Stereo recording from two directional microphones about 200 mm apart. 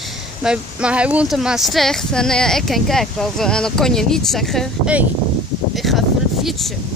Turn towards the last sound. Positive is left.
turn(degrees=0)  # may be behind; listen again after turning